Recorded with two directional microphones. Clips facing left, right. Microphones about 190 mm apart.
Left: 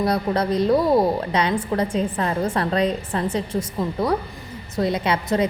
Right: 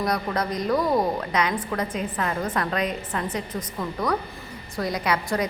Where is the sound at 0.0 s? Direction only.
30° left (ahead or behind).